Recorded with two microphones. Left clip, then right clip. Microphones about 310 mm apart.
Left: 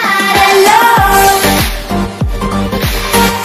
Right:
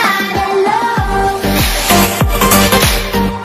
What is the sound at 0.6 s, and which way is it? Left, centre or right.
Music, left.